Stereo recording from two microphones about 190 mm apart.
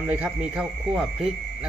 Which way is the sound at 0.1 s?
5° right (ahead or behind).